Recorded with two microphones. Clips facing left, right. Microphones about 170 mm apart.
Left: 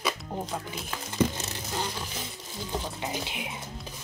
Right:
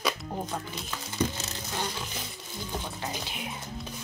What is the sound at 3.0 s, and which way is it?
Speech, 20° left (ahead or behind).